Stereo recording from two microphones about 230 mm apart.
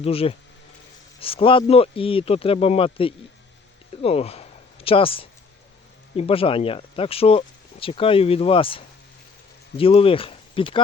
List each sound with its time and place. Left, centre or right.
0.0 s speech: left